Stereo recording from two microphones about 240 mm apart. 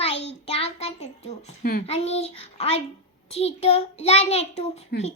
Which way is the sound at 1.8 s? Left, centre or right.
Left.